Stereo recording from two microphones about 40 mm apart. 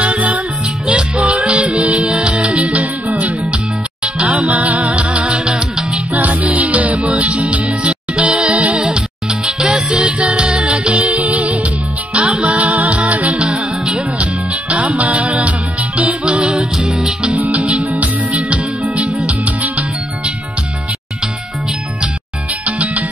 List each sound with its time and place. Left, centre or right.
0.0 s music: right
2.1 s music: centre
4.0 s music: right
5.4 s music: right
6.1 s music: right
9.4 s music: centre
17.6 s music: right
22.7 s music: right